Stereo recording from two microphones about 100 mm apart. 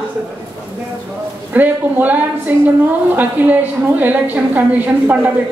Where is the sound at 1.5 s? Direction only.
15° right (ahead or behind).